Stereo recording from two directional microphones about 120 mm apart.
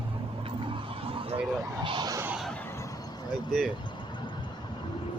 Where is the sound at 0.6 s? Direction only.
50° right (ahead or behind).